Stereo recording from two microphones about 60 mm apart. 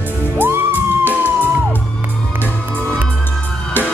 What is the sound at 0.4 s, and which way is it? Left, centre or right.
Music, right.